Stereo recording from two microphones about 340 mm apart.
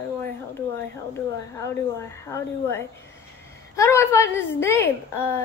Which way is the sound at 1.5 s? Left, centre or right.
Centre.